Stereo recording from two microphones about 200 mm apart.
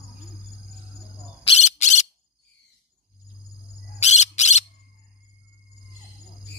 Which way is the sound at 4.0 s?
35° left (ahead or behind).